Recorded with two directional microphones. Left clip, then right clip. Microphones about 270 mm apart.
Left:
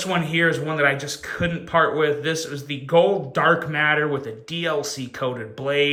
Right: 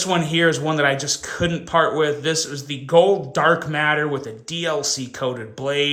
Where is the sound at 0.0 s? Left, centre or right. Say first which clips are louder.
Right 2 dB; centre.